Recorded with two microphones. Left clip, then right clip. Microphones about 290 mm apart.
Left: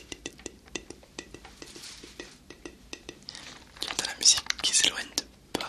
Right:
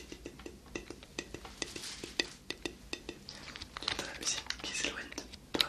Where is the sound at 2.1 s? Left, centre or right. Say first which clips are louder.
Right 8 dB; centre.